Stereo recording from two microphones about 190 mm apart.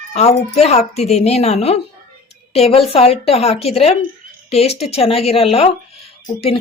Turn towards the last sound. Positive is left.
turn(degrees=30)  # may be behind; listen again after turning